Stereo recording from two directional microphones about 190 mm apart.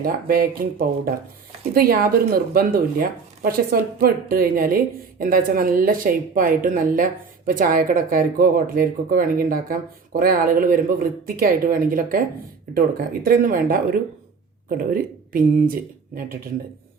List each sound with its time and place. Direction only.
0.0 s speech: 50° right (ahead or behind)
13.2 s speech: 50° right (ahead or behind)